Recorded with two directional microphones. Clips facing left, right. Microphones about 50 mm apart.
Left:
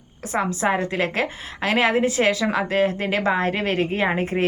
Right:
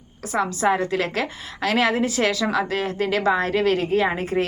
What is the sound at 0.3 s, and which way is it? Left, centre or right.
Speech, left.